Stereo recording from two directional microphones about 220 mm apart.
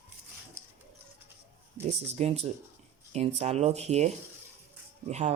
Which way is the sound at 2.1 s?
30° right (ahead or behind).